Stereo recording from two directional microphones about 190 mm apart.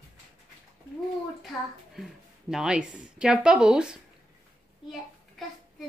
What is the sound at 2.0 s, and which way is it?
A woman's voice, 5° right (ahead or behind).